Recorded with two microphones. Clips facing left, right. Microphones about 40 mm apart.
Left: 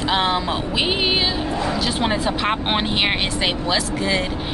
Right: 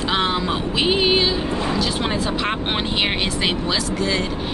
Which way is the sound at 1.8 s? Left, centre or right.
Centre.